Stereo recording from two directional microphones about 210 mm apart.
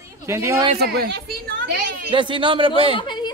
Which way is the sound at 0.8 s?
50° right (ahead or behind).